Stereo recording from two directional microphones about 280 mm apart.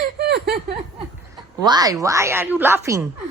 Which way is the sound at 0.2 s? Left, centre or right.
Right.